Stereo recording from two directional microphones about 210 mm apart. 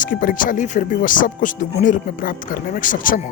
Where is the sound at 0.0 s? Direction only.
40° left (ahead or behind).